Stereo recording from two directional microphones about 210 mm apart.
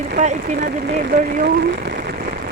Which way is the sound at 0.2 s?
35° right (ahead or behind).